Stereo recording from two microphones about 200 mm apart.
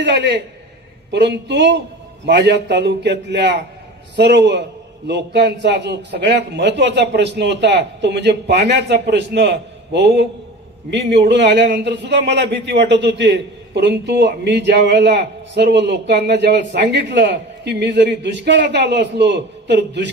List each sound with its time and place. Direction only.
0.0 s a man's voice: 60° right (ahead or behind)